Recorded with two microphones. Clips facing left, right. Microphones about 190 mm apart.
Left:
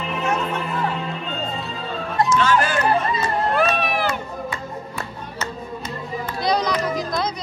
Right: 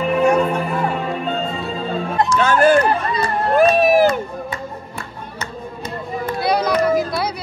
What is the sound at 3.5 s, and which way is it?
Crowd, 45° right (ahead or behind).